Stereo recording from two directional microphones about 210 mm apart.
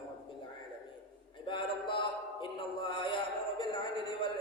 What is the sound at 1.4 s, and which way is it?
Music, 25° left (ahead or behind).